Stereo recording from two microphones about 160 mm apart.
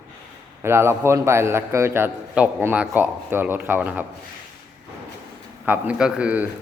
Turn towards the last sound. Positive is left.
turn(degrees=-10)  # may be behind; listen again after turning